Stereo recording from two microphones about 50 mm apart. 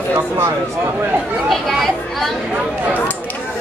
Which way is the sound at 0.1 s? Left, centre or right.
Right.